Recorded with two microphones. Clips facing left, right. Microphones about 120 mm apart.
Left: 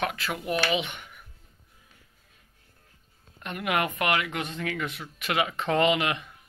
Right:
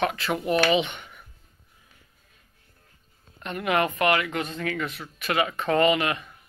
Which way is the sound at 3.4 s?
10° left (ahead or behind).